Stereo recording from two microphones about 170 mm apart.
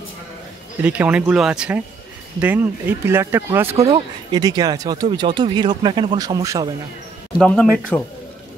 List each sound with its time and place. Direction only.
0.8 s speech: 10° right (ahead or behind)
3.8 s speech: 25° right (ahead or behind)
7.3 s speech: 5° left (ahead or behind)